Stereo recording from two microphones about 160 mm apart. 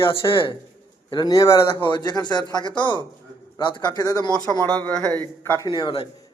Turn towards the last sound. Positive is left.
turn(degrees=30)  # may be behind; listen again after turning